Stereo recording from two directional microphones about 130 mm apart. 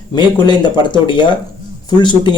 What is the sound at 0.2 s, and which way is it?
Speech, 35° left (ahead or behind).